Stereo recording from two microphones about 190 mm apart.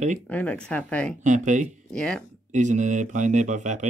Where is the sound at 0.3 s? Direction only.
5° left (ahead or behind).